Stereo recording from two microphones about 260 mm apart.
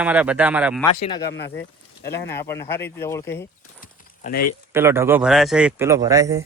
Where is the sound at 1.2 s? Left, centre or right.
Left.